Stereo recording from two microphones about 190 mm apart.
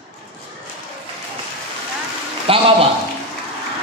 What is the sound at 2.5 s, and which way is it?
Speech, 30° right (ahead or behind).